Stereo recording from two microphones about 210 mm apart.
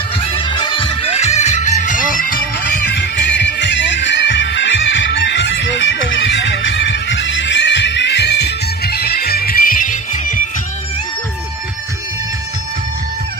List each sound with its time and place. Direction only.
0.2 s music: 25° left (ahead or behind)
2.1 s bagpipes: 40° left (ahead or behind)
2.9 s music: 55° left (ahead or behind); by 10.5 s 40° left (ahead or behind)